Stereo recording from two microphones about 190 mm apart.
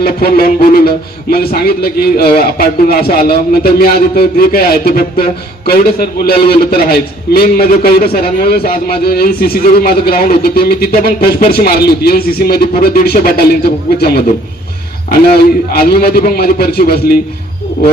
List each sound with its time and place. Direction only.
0.0 s a man's voice: 55° left (ahead or behind)
15.1 s a man's voice: 55° left (ahead or behind)